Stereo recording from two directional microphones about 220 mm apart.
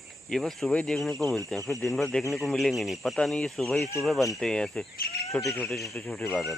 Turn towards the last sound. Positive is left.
turn(degrees=5)  # may be behind; listen again after turning